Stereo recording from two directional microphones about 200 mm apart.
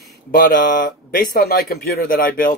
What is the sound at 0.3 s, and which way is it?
Speech, 45° left (ahead or behind).